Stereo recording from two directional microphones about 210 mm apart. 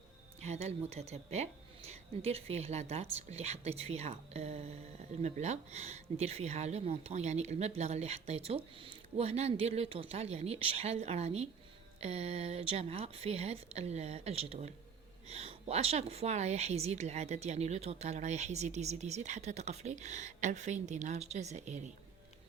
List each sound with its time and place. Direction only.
0.4 s speech: 30° right (ahead or behind)